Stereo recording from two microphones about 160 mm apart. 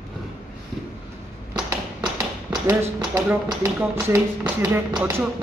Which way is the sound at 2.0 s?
20° right (ahead or behind).